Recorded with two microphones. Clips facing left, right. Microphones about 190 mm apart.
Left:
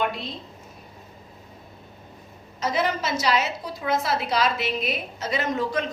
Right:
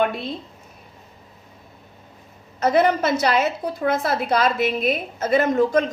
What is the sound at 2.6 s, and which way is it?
A woman's voice, 55° right (ahead or behind).